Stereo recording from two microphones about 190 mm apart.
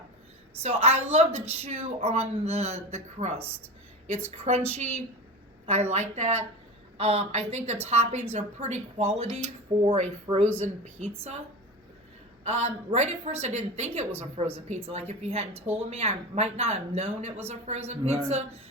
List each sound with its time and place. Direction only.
0.6 s a woman's voice: 35° right (ahead or behind)
12.5 s a woman's voice: 35° right (ahead or behind)